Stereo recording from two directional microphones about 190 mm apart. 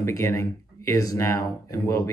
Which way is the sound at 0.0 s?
15° left (ahead or behind).